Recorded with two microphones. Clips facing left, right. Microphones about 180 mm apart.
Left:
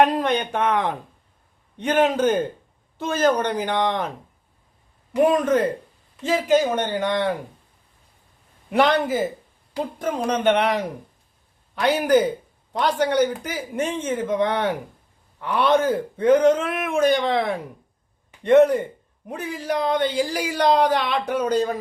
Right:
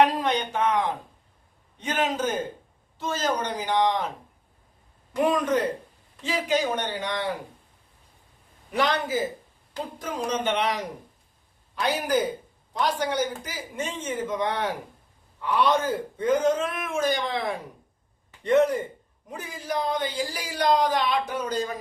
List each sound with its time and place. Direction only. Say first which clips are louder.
0.2 s speech: left 3 dB; 55° left (ahead or behind)
6.2 s a man's voice: left 6 dB; 50° left (ahead or behind)
8.7 s speech: left 6 dB; 60° left (ahead or behind)
18.4 s speech: left 6 dB; 60° left (ahead or behind)